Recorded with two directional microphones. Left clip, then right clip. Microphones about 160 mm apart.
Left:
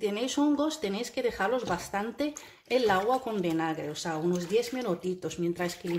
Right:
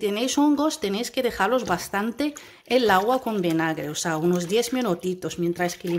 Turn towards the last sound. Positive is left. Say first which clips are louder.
# right 6 dB
turn(degrees=-25)  # may be behind; listen again after turning